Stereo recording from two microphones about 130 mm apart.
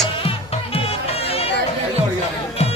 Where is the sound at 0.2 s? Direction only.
50° left (ahead or behind).